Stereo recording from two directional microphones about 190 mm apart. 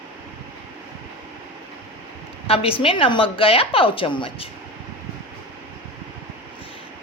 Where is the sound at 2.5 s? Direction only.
30° left (ahead or behind).